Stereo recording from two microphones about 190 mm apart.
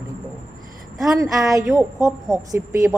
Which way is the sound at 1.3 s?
15° right (ahead or behind).